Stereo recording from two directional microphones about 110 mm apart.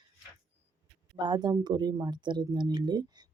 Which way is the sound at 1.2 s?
40° right (ahead or behind).